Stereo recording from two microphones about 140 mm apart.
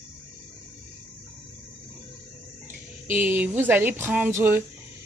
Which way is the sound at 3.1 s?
15° right (ahead or behind).